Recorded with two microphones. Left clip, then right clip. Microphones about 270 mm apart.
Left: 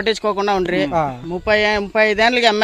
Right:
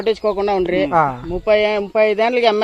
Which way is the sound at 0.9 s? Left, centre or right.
Centre.